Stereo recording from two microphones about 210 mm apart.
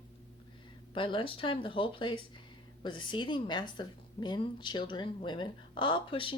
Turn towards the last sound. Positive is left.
turn(degrees=25)  # may be behind; listen again after turning